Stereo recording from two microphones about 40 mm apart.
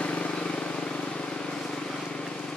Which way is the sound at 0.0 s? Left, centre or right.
Left.